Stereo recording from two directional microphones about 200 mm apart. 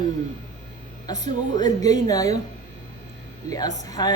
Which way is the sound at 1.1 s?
20° left (ahead or behind).